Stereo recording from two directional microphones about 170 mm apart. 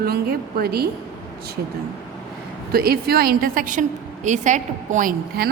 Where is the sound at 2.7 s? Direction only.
65° right (ahead or behind).